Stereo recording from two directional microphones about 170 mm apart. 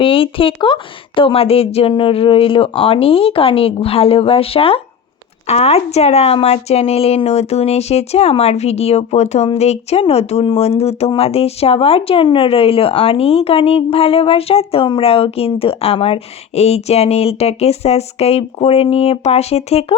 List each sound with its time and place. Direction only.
0.0 s a woman's voice: 30° left (ahead or behind)